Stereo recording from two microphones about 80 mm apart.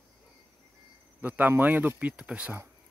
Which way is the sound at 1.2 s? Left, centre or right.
Right.